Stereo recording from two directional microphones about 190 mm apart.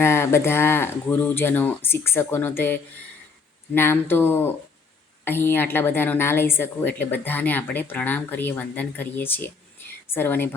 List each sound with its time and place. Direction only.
0.0 s a woman's voice: 15° left (ahead or behind)
4.1 s a woman's voice: 10° left (ahead or behind)